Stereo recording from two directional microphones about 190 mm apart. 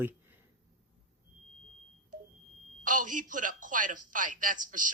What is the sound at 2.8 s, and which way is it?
Speech, 45° right (ahead or behind).